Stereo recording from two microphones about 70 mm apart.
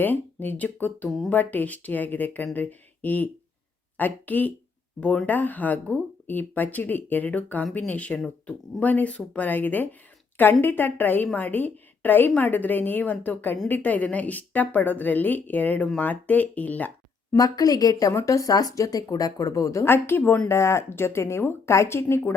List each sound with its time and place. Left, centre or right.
0.0 s speech: left
1.0 s speech: centre
1.3 s speech: left
17.3 s a woman's voice: left
18.1 s speech: left
19.8 s speech: left